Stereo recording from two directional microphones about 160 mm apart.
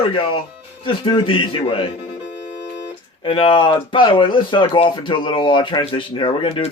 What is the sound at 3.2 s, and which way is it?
Speech, 30° left (ahead or behind).